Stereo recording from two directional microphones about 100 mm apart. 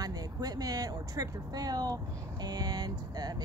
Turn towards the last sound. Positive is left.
turn(degrees=-40)  # may be behind; listen again after turning